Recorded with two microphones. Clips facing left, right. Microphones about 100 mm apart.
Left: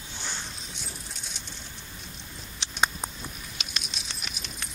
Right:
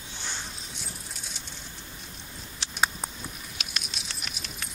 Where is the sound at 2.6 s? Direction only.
Centre (ahead or behind).